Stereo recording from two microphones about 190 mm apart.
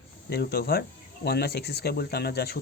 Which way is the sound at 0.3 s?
55° left (ahead or behind).